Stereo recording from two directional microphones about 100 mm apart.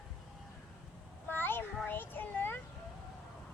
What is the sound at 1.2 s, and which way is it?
Child singing, 20° left (ahead or behind).